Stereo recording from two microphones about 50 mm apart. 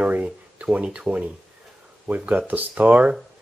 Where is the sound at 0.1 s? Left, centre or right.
Right.